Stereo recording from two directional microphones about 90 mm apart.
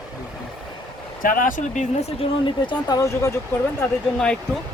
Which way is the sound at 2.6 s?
50° left (ahead or behind).